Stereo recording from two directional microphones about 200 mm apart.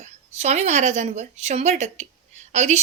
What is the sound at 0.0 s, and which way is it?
A woman's voice, 35° right (ahead or behind).